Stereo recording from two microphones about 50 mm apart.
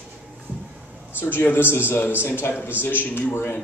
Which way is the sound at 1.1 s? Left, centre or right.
Left.